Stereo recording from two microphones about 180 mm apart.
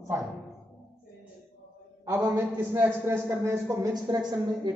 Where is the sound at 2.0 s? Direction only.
15° right (ahead or behind).